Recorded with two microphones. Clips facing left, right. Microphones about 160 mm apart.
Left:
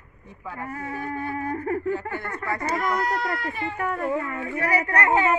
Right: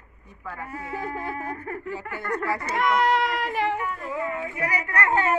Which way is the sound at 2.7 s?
90° right.